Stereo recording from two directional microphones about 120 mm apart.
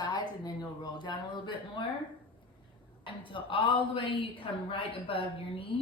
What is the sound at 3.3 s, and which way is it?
Speech, 45° left (ahead or behind).